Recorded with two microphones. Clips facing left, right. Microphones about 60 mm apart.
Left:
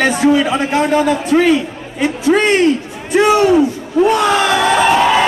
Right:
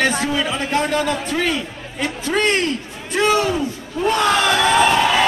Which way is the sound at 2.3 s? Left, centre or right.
Centre.